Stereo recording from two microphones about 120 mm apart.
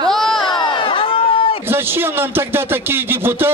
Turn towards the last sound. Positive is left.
turn(degrees=-20)  # may be behind; listen again after turning